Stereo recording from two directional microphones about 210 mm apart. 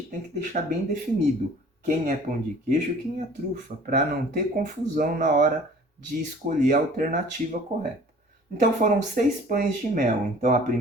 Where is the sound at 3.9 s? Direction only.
40° right (ahead or behind).